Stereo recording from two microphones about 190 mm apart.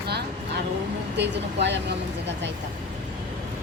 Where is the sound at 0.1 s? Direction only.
60° right (ahead or behind).